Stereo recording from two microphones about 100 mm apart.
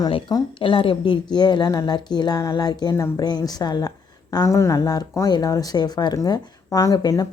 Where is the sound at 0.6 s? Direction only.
60° left (ahead or behind).